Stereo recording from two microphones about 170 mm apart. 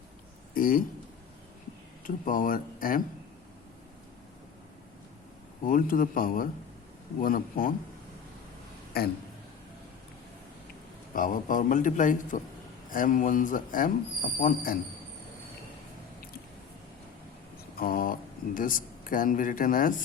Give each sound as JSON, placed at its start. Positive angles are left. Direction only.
{"t": 0.5, "sound": "a man's voice", "side_deg": 55}
{"t": 2.0, "sound": "speech", "side_deg": 55}
{"t": 5.6, "sound": "a man's voice", "side_deg": 55}
{"t": 11.1, "sound": "a man's voice", "side_deg": 50}
{"t": 17.7, "sound": "speech", "side_deg": 60}